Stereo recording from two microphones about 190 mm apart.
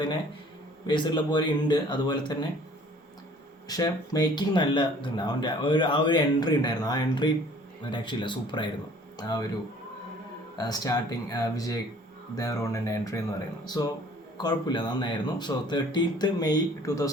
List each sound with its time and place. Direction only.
0.9 s speech: 25° left (ahead or behind)
3.7 s speech: 20° left (ahead or behind)
10.6 s speech: 20° left (ahead or behind)